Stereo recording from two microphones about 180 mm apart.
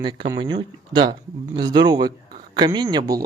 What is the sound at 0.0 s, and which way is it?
Speech, 25° right (ahead or behind).